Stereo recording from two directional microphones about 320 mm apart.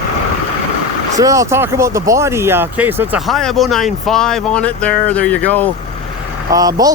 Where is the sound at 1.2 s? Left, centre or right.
Centre.